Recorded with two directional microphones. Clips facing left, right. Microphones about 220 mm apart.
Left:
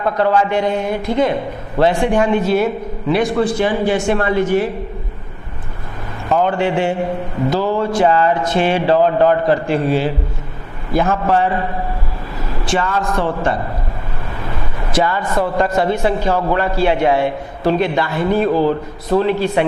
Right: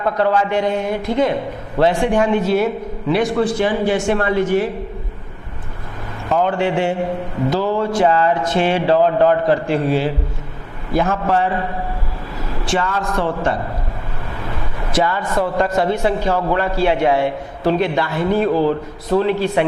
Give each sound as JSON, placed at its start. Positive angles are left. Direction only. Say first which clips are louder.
{"t": 0.0, "sound": "a man's voice", "louder": "left 1 dB", "side_deg": 20}
{"t": 6.2, "sound": "a man's voice", "louder": "left 1 dB", "side_deg": 20}
{"t": 14.9, "sound": "a man's voice", "louder": "left 1 dB", "side_deg": 20}